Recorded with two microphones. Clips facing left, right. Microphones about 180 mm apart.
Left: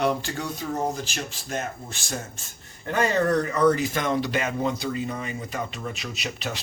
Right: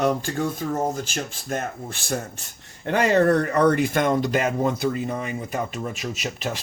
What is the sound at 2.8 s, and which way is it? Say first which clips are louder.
A man's voice: right 4 dB; 75° right (ahead or behind).